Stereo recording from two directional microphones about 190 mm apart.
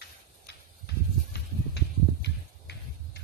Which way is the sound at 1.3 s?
60° left (ahead or behind).